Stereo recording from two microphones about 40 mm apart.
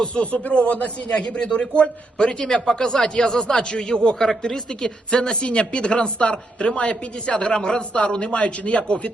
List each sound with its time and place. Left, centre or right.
0.0 s a man's voice: left